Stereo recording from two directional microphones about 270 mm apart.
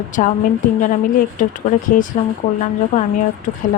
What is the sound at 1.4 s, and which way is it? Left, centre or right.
Speech, left.